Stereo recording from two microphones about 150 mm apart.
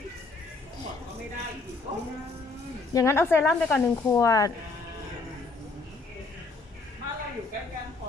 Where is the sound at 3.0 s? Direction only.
15° left (ahead or behind).